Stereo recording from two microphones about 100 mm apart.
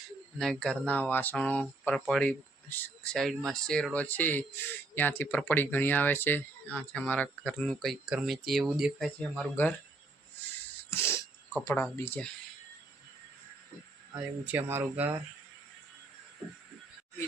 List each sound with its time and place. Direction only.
0.3 s speech: 5° left (ahead or behind)
2.6 s speech: 20° left (ahead or behind); by 9.5 s centre (ahead or behind)
10.9 s speech: 25° left (ahead or behind)
14.1 s speech: 15° right (ahead or behind)